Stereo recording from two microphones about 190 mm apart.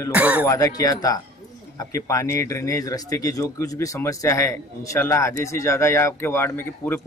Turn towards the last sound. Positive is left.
turn(degrees=10)  # may be behind; listen again after turning